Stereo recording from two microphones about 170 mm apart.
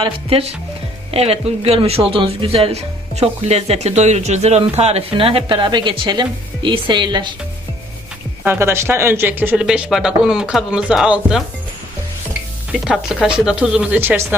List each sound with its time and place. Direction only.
0.0 s speech: 35° right (ahead or behind)
8.4 s speech: 15° right (ahead or behind)
12.7 s speech: 5° right (ahead or behind)